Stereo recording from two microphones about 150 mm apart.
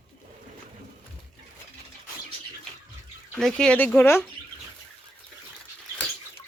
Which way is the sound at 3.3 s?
5° left (ahead or behind).